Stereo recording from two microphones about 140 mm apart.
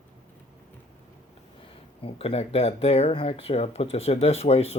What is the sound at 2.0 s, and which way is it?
Speech, 45° left (ahead or behind).